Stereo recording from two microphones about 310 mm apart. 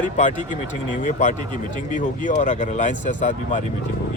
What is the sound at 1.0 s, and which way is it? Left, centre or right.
Speech, left.